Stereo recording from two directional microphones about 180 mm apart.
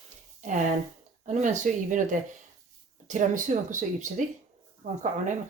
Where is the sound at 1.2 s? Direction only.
40° right (ahead or behind).